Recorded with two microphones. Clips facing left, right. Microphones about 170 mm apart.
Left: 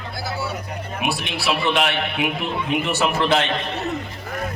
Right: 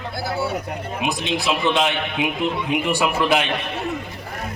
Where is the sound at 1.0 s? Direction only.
20° right (ahead or behind).